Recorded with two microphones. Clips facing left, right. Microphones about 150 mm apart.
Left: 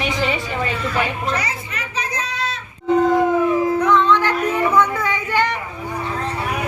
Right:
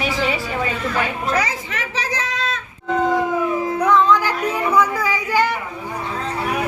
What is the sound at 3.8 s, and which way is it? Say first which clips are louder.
Music: right 5 dB; 10° right (ahead or behind).